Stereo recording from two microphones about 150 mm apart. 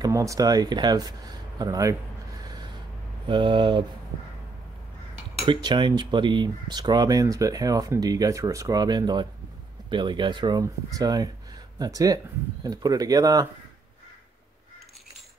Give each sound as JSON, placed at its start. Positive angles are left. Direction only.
{"t": 0.0, "sound": "speech", "side_deg": -20}
{"t": 3.3, "sound": "speech", "side_deg": -35}
{"t": 5.4, "sound": "speech", "side_deg": -30}